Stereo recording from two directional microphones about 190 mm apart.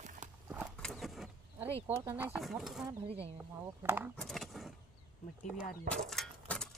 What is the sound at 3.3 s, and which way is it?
Speech, 10° right (ahead or behind).